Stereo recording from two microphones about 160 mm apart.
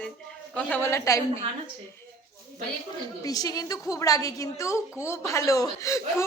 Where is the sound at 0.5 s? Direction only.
15° left (ahead or behind).